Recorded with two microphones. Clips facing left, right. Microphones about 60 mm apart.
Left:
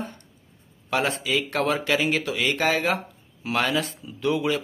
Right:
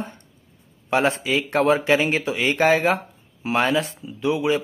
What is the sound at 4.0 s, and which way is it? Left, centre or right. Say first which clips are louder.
Speech: right 2 dB; centre.